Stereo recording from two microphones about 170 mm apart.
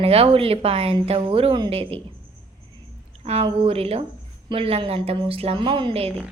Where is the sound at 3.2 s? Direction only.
35° right (ahead or behind).